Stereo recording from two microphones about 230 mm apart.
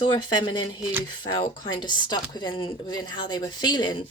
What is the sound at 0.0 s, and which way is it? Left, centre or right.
Speech, centre.